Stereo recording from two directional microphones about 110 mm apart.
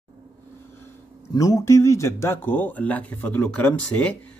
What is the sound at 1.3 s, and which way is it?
Speech, 35° left (ahead or behind).